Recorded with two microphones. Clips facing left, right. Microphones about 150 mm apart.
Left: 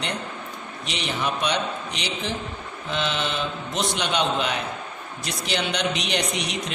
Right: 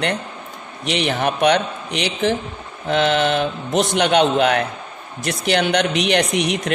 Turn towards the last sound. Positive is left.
turn(degrees=-60)  # may be behind; listen again after turning